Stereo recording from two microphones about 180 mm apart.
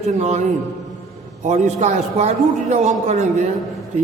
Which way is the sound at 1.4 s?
40° right (ahead or behind).